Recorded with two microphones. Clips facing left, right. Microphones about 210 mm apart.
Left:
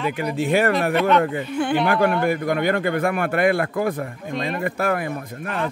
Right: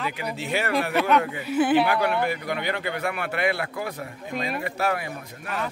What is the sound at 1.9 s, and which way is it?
A man's voice, 50° left (ahead or behind).